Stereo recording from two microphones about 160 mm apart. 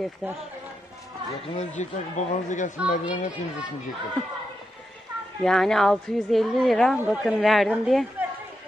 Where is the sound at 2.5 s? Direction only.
50° left (ahead or behind).